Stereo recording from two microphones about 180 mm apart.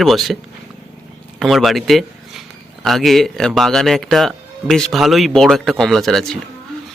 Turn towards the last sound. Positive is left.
turn(degrees=0)  # may be behind; listen again after turning